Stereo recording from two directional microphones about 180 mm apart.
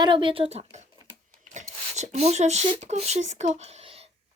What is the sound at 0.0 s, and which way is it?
Speech, 25° right (ahead or behind).